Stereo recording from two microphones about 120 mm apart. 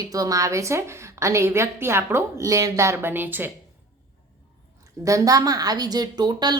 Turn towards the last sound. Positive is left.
turn(degrees=-35)  # may be behind; listen again after turning